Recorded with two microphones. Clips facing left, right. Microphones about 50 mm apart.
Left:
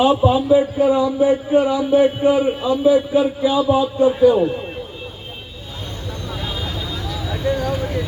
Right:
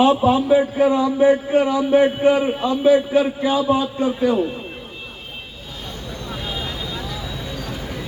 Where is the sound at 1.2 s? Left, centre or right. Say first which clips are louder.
Right 3 dB; right.